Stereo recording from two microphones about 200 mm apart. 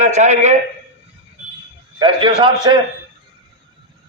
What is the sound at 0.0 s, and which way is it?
Speech, 35° right (ahead or behind).